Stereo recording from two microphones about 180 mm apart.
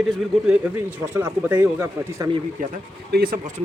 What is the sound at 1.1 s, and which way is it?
Speech, 15° right (ahead or behind).